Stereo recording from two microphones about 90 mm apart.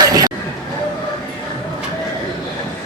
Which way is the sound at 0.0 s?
45° right (ahead or behind).